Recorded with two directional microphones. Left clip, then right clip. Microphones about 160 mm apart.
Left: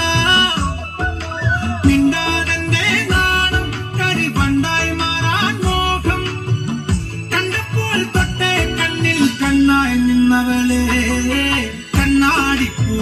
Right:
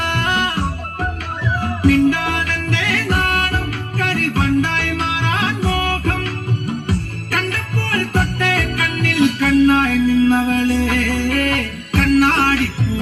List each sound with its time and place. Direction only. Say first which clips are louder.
0.0 s music: left 4 dB; 25° left (ahead or behind)
1.8 s music: even; 30° left (ahead or behind)
7.3 s music: left 1 dB; 30° left (ahead or behind)